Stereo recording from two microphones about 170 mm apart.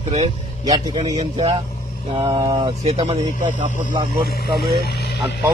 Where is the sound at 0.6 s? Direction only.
25° right (ahead or behind).